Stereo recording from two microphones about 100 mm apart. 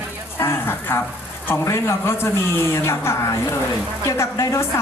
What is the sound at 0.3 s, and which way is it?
Speech, 25° left (ahead or behind).